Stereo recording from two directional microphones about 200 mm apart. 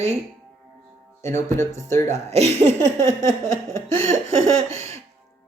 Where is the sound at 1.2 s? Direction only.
15° left (ahead or behind).